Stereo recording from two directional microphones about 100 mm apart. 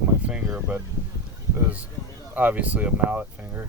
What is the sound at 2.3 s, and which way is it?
Speech, 15° right (ahead or behind).